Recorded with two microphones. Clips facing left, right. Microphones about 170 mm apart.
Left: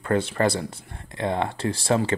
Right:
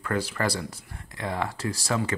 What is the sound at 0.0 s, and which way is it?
Speech, 25° left (ahead or behind).